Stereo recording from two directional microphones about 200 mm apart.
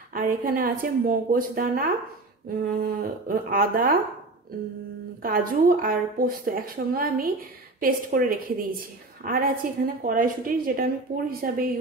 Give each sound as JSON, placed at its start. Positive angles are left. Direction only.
{"t": 0.1, "sound": "a woman's voice", "side_deg": -45}
{"t": 5.2, "sound": "a woman's voice", "side_deg": -45}